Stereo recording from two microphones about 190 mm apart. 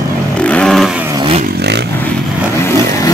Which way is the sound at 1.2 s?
30° right (ahead or behind).